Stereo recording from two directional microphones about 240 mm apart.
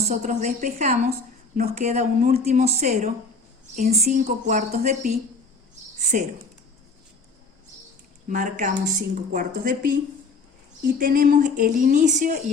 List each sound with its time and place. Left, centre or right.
0.0 s a woman's voice: right
6.0 s a sound: right
8.3 s speech: right